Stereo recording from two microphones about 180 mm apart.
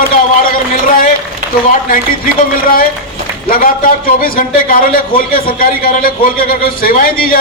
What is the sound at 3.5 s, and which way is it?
A man's voice, 50° left (ahead or behind).